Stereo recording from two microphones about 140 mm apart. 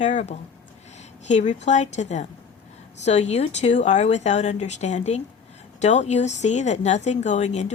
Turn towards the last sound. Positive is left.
turn(degrees=55)  # may be behind; listen again after turning